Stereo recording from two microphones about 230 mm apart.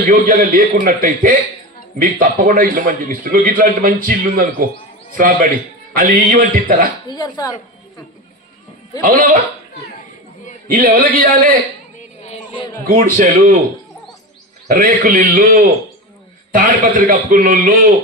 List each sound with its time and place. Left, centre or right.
0.1 s a man's voice: right
7.1 s speech: centre
9.0 s a man's voice: right
10.7 s a man's voice: right
11.9 s a sound: left
12.9 s a man's voice: right
14.7 s a man's voice: right